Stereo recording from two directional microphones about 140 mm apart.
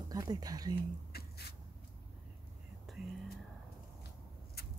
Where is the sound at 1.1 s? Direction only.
90° left.